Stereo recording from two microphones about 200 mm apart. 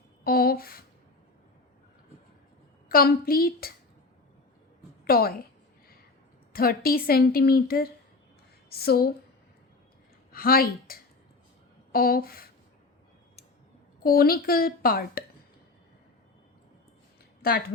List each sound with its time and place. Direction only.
0.3 s a sound: 50° left (ahead or behind)
2.9 s a woman's voice: 50° left (ahead or behind)
5.0 s a woman's voice: 50° left (ahead or behind)
6.5 s a woman's voice: 45° left (ahead or behind)
10.3 s a woman's voice: 45° left (ahead or behind)
14.0 s a woman's voice: 45° left (ahead or behind)